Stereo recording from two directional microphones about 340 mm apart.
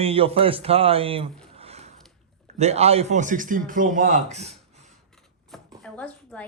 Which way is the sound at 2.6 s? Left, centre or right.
Centre.